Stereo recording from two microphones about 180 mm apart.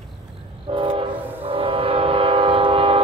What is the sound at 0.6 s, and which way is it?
Train, 30° right (ahead or behind).